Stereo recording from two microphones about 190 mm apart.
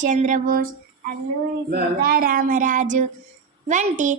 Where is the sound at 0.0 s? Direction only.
40° right (ahead or behind).